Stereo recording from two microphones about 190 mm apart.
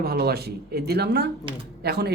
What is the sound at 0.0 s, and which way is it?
Speech, 55° right (ahead or behind).